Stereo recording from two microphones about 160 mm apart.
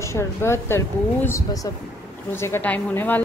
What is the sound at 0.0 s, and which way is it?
Speech, 15° left (ahead or behind).